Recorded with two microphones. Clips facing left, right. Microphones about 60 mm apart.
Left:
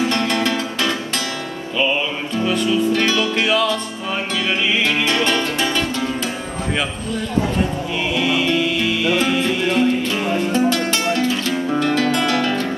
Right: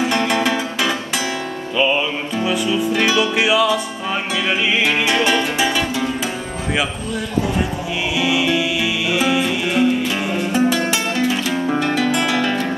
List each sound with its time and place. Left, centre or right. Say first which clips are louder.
0.0 s music: right 1 dB; centre
2.3 s music: left 1 dB; centre
8.2 s music: right 1 dB; centre